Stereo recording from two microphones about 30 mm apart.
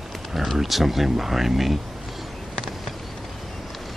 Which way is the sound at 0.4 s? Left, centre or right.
Centre.